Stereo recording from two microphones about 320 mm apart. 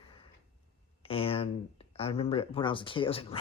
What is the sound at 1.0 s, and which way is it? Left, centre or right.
Speech, centre.